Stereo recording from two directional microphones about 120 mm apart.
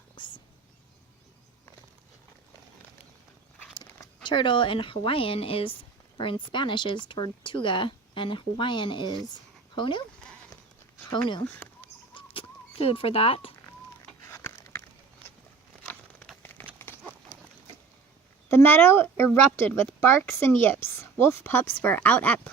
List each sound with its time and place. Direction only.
0.2 s whispering: 40° left (ahead or behind)
4.2 s speech: 40° left (ahead or behind)
11.1 s speech: 40° left (ahead or behind)
11.8 s a sound: 45° left (ahead or behind)
14.3 s a sound: 20° left (ahead or behind)
15.9 s crumpling: centre (ahead or behind)
16.4 s a sound: 15° left (ahead or behind)
16.7 s horse: 20° left (ahead or behind)
18.4 s a woman's voice: 20° left (ahead or behind)